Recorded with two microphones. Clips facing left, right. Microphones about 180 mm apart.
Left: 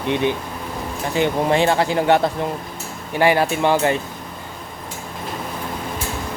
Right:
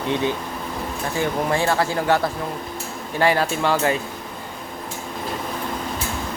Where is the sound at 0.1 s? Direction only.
20° left (ahead or behind).